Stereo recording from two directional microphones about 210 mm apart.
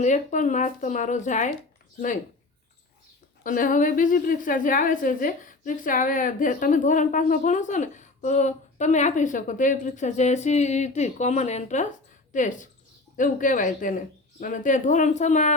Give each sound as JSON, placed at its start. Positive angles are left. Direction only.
{"t": 0.0, "sound": "a woman's voice", "side_deg": 35}
{"t": 3.4, "sound": "a woman's voice", "side_deg": 40}